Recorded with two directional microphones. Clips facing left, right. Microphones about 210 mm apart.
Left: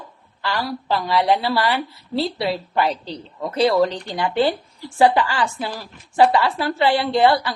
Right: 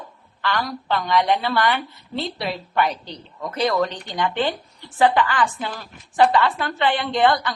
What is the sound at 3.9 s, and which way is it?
Speech, 10° left (ahead or behind).